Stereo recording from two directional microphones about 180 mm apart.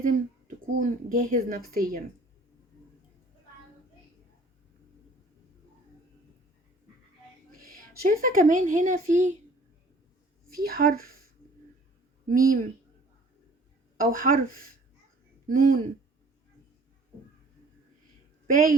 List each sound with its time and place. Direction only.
0.0 s speech: 50° right (ahead or behind)
7.6 s a woman's voice: 50° right (ahead or behind)
10.5 s speech: 55° right (ahead or behind)
12.3 s speech: 50° right (ahead or behind)
14.0 s speech: 50° right (ahead or behind)
18.4 s speech: 50° right (ahead or behind)